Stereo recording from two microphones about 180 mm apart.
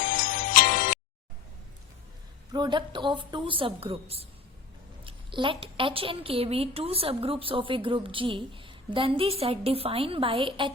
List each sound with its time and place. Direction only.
0.0 s music: 50° left (ahead or behind)
2.5 s a woman's voice: 25° right (ahead or behind)